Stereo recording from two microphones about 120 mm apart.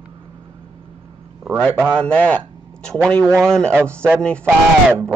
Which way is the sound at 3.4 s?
5° left (ahead or behind).